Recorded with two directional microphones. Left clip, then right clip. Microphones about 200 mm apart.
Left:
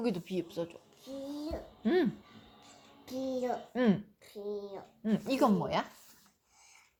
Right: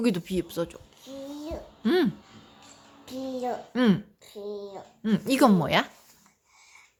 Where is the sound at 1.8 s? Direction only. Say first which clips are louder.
Right 6 dB; 30° right (ahead or behind).